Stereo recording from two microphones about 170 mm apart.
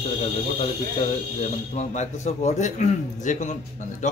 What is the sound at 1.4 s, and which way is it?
Speech, 40° left (ahead or behind).